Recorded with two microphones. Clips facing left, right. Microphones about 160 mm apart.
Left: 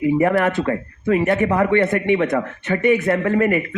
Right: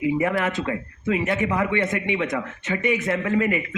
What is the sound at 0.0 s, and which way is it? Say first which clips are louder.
Speech: left 6 dB; 50° left (ahead or behind).